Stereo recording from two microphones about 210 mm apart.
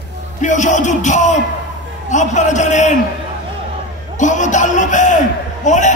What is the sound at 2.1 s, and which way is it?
Speech, 35° left (ahead or behind).